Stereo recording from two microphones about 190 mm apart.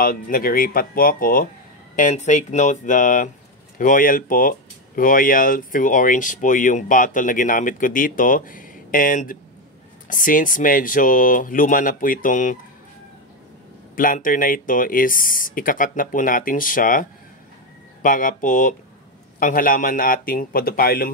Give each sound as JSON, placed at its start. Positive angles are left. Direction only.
{"t": 0.0, "sound": "speech", "side_deg": 50}
{"t": 13.9, "sound": "speech", "side_deg": 45}